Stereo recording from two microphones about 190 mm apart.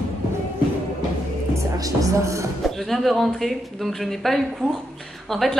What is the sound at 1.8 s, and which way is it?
Speech, 15° right (ahead or behind).